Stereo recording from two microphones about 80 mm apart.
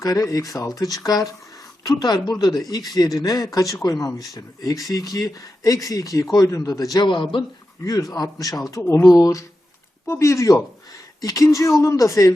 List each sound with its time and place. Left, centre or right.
0.0 s a woman's voice: left
6.9 s a man's voice: left
7.9 s speech: left
10.1 s speech: left